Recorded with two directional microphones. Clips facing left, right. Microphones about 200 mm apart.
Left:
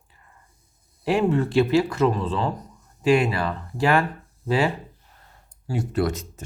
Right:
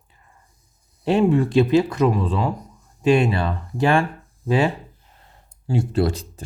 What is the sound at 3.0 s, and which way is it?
Speech, 25° right (ahead or behind).